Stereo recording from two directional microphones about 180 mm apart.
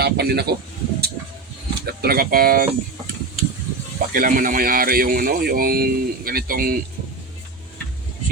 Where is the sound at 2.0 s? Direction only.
55° right (ahead or behind).